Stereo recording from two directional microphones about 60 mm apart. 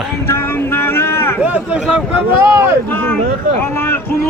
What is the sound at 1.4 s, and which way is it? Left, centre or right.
Speech, right.